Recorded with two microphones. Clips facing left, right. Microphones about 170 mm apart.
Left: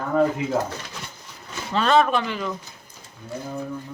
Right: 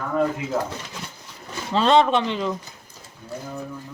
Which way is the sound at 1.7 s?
25° right (ahead or behind).